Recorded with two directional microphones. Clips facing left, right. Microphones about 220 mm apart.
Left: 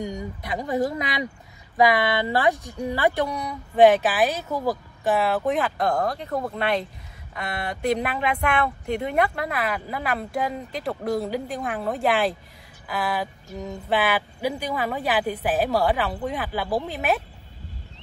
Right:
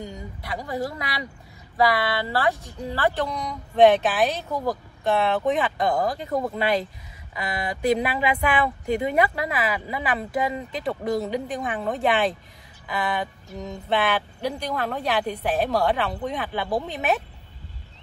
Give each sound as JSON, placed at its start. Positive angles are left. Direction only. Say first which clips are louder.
{"t": 0.0, "sound": "speech", "louder": "left 5 dB", "side_deg": 20}